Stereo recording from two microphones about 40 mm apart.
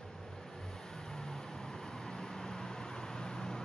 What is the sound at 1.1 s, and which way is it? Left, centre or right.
Vehicle, centre.